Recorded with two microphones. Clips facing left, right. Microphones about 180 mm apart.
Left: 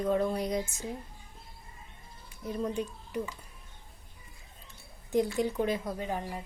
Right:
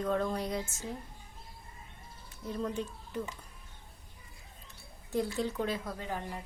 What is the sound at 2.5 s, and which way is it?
Speech, 15° left (ahead or behind).